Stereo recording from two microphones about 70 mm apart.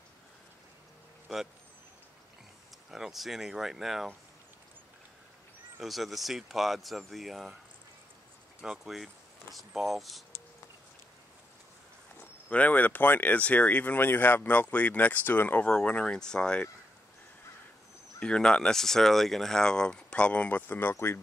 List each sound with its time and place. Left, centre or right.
2.9 s speech: centre
5.8 s speech: centre
8.5 s speech: centre
12.4 s speech: left
15.6 s speech: centre
18.2 s speech: centre; by 21.2 s left